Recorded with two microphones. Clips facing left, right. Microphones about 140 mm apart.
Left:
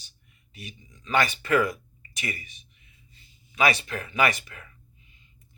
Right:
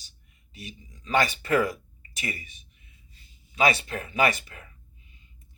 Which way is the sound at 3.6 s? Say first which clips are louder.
Right 1 dB; 30° right (ahead or behind).